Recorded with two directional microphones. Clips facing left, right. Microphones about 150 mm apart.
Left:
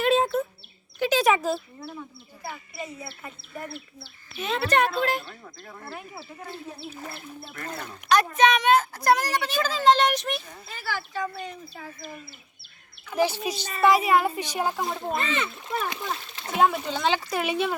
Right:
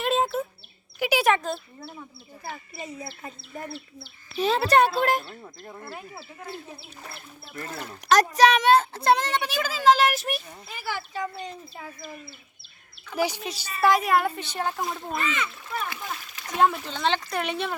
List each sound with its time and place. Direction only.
0.0 s bird: centre (ahead or behind)
0.9 s a sound: 10° right (ahead or behind)
1.3 s speech: 5° left (ahead or behind)
4.4 s speech: 35° right (ahead or behind)
8.1 s a child's voice: 40° right (ahead or behind)
9.5 s speech: 10° right (ahead or behind)
10.8 s speech: 20° right (ahead or behind)
13.1 s speech: 10° right (ahead or behind)
13.8 s speech: centre (ahead or behind)
15.1 s a child's voice: 30° left (ahead or behind)
16.6 s speech: 5° left (ahead or behind)